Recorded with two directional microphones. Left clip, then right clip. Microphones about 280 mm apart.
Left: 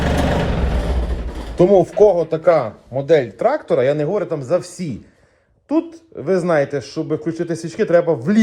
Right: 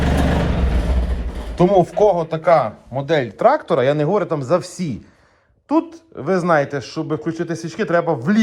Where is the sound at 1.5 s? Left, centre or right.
Centre.